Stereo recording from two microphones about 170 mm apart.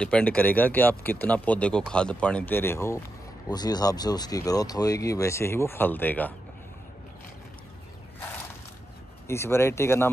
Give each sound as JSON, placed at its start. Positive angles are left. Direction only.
{"t": 0.0, "sound": "speech", "side_deg": 5}
{"t": 9.3, "sound": "speech", "side_deg": 15}